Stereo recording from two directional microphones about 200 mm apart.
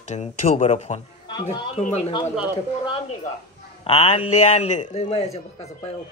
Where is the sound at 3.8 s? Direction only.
30° left (ahead or behind).